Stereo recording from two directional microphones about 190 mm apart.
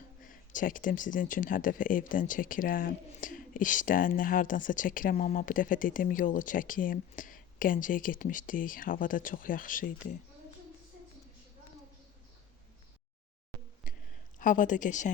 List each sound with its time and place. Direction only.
0.2 s speech: 45° left (ahead or behind)
13.9 s a sound: 45° left (ahead or behind)
14.3 s speech: 45° left (ahead or behind)